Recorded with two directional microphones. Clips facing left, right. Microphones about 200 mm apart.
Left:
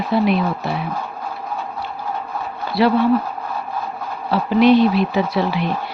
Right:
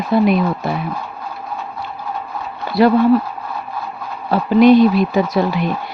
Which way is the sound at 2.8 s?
45° right (ahead or behind).